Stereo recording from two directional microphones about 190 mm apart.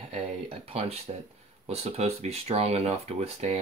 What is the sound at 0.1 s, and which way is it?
Speech, 30° right (ahead or behind).